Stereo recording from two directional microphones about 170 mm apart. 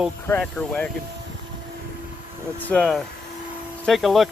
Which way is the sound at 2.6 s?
5° left (ahead or behind).